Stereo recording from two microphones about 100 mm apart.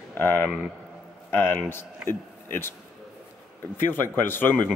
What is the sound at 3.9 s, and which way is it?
Speech, 20° left (ahead or behind).